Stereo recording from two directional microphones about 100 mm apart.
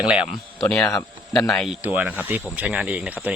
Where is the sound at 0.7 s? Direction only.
5° left (ahead or behind).